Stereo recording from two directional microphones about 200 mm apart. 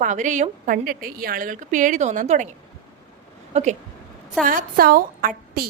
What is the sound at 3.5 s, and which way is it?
A woman's voice, 35° right (ahead or behind).